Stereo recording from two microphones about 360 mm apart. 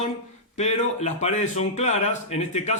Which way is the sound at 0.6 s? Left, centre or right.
Centre.